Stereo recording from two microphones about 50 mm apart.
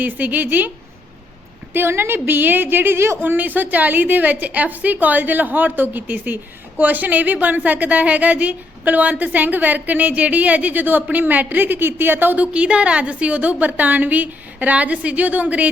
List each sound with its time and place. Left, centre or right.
0.0 s a woman's voice: right
1.7 s a woman's voice: right
12.5 s a woman's voice: right